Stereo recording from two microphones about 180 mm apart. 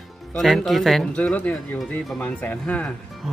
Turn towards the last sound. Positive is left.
turn(degrees=5)  # may be behind; listen again after turning